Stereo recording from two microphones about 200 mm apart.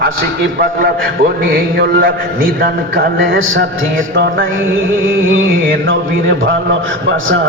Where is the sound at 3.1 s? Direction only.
80° right.